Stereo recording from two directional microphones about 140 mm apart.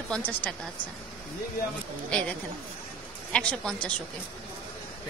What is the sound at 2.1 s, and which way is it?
A woman's voice, 10° left (ahead or behind).